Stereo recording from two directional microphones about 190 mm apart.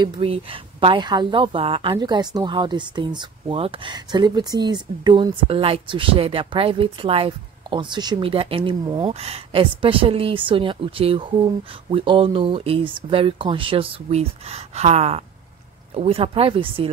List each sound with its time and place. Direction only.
0.0 s a woman's voice: 30° right (ahead or behind)